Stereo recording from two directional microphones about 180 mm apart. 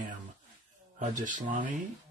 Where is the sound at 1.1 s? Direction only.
45° right (ahead or behind).